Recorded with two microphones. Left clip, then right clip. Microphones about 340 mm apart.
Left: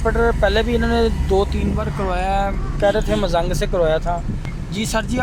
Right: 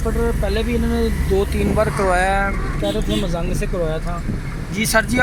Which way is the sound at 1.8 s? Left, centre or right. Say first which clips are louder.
Right 7 dB; centre.